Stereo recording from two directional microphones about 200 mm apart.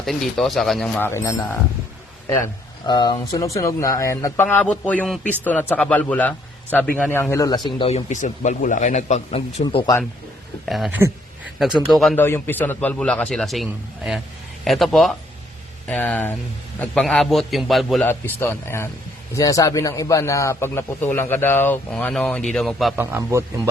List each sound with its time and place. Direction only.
0.0 s speech: centre (ahead or behind)
2.8 s a man's voice: 20° left (ahead or behind)
9.6 s speech: 20° left (ahead or behind)
10.7 s a man's voice: centre (ahead or behind)
18.1 s a man's voice: 10° left (ahead or behind)
23.0 s a man's voice: 10° right (ahead or behind)